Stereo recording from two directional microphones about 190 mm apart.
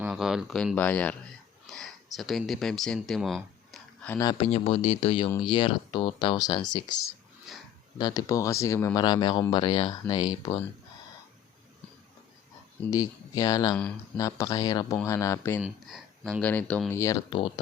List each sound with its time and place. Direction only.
0.0 s speech: centre (ahead or behind)
4.2 s speech: 20° left (ahead or behind)
4.4 s speech: 35° left (ahead or behind)
7.5 s a sound: centre (ahead or behind)
7.9 s speech: 20° left (ahead or behind)
12.9 s speech: 20° left (ahead or behind)
15.6 s speech: centre (ahead or behind)
17.2 s speech: 25° left (ahead or behind)